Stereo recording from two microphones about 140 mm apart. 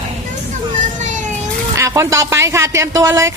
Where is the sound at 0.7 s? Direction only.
60° right (ahead or behind).